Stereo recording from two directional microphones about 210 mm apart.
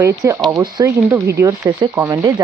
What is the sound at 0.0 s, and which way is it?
Speech, 15° right (ahead or behind).